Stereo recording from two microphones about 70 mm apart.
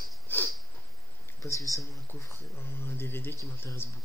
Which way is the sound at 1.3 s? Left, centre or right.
Left.